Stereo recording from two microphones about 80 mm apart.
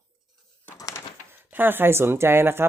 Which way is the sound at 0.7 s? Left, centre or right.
Left.